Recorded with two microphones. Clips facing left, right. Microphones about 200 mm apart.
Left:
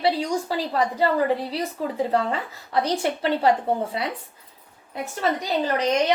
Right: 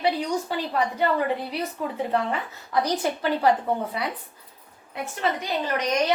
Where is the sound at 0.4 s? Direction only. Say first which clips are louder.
Left 2 dB; 35° left (ahead or behind).